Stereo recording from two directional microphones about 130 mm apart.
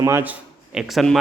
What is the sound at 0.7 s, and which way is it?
Speech, centre (ahead or behind).